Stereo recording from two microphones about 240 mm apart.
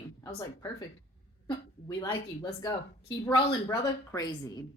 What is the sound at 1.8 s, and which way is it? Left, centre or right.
A woman's voice, centre.